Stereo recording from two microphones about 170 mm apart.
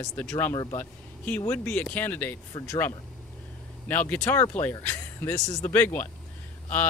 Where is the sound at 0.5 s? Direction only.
25° left (ahead or behind).